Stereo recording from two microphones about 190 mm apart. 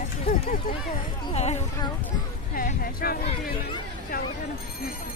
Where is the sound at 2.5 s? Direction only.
45° left (ahead or behind).